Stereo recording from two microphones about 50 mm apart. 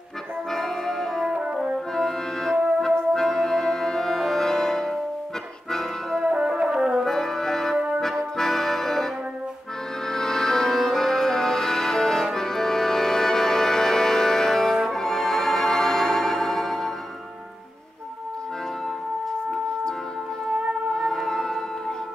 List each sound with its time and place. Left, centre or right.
0.5 s brass instrument: centre
1.3 s french horn: right
2.0 s music: centre
6.2 s music: centre
7.1 s french horn: centre
8.0 s accordion: centre
10.0 s music: centre
20.9 s music: centre